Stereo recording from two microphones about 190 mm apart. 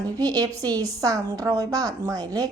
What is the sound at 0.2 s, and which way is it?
A woman's voice, 20° right (ahead or behind).